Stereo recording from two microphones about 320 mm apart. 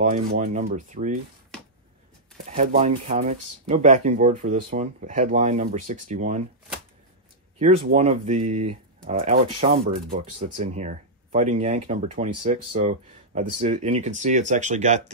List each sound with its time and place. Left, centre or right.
0.0 s speech: right
2.3 s speech: right
7.5 s speech: centre